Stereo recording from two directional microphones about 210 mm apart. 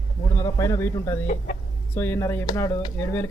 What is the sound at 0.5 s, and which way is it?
Speech, 15° left (ahead or behind).